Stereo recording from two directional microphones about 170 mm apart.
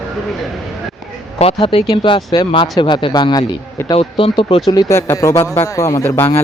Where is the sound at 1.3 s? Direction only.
35° left (ahead or behind); by 6.4 s 15° left (ahead or behind).